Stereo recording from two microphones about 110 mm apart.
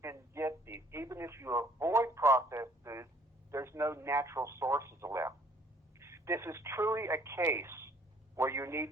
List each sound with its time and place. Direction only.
0.0 s radio: 25° right (ahead or behind)
6.0 s telephone: 25° right (ahead or behind)
8.4 s speech: 25° right (ahead or behind)